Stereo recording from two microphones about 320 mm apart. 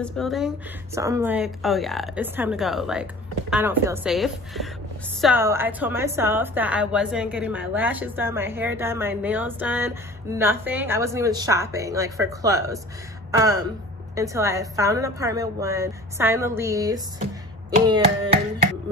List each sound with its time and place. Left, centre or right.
0.0 s a woman's voice: centre